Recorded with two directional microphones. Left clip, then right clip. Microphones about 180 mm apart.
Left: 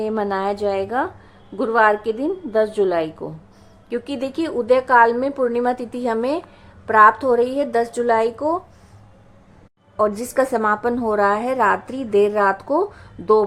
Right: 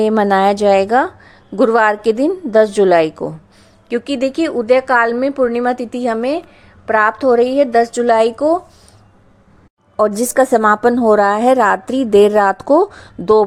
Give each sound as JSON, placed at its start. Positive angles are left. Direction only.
{"t": 0.0, "sound": "a woman's voice", "side_deg": -35}
{"t": 10.0, "sound": "a woman's voice", "side_deg": -35}